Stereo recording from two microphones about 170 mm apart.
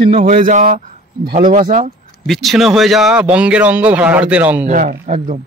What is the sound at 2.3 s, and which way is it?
Speech, centre (ahead or behind).